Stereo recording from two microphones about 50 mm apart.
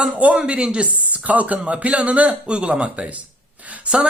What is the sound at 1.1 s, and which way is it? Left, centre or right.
A man's voice, right.